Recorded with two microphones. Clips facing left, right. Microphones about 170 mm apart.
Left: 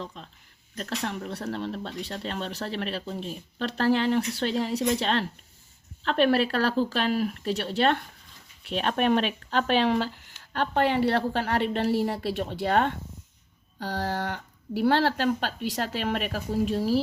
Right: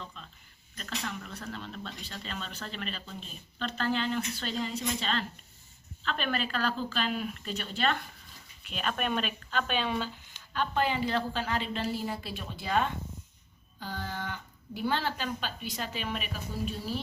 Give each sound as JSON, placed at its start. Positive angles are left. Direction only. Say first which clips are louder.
{"t": 0.8, "sound": "speech", "louder": "left 7 dB", "side_deg": 65}
{"t": 13.7, "sound": "speech", "louder": "left 8 dB", "side_deg": 80}